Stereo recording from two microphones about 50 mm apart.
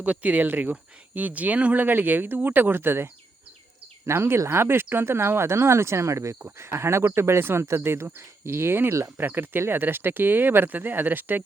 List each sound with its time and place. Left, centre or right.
0.0 s speech: right
4.0 s speech: right
6.4 s speech: right
7.0 s speech: right
8.9 s speech: right
9.1 s speech: right